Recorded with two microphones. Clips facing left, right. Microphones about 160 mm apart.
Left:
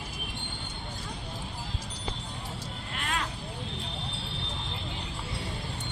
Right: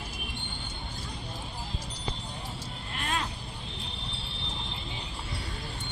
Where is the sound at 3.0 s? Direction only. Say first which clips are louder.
Right 1 dB; 25° right (ahead or behind).